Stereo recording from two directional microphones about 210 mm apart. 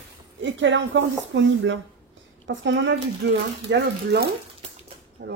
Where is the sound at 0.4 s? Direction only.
60° right (ahead or behind).